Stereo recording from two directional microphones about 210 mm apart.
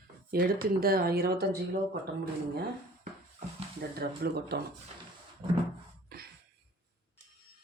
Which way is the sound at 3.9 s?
50° right (ahead or behind).